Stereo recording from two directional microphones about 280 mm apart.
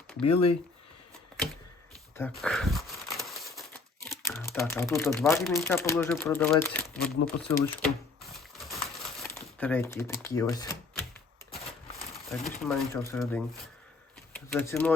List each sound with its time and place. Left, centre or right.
0.2 s speech: left
1.3 s typewriter: centre
2.1 s crumpling: centre
4.3 s speech: centre
9.2 s speech: centre
12.5 s speech: centre